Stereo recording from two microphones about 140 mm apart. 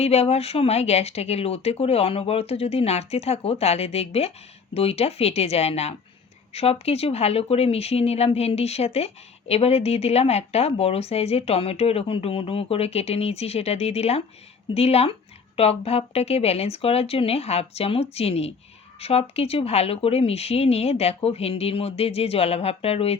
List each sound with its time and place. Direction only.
0.0 s speech: 45° left (ahead or behind)